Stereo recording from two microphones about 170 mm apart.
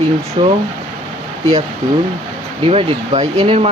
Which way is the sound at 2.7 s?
40° right (ahead or behind).